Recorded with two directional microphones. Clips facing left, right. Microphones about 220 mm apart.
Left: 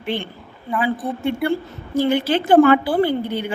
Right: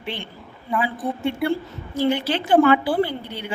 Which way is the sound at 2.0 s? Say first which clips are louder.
Left 3 dB; 50° left (ahead or behind).